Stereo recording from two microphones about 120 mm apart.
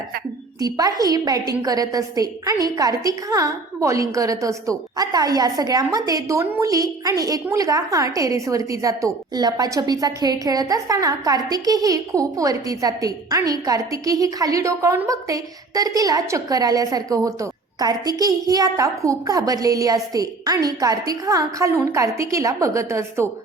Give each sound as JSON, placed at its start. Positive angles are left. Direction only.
{"t": 0.6, "sound": "a woman's voice", "side_deg": -30}